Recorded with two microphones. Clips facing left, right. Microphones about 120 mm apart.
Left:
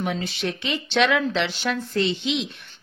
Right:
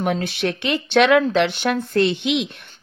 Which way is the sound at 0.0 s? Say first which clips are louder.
Right 5 dB; 60° right (ahead or behind).